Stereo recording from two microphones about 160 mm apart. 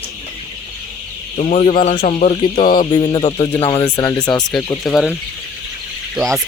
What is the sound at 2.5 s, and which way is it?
Music, 60° left (ahead or behind).